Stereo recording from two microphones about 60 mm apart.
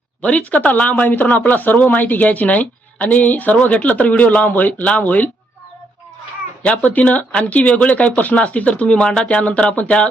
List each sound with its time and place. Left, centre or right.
0.2 s speech: left
6.7 s speech: left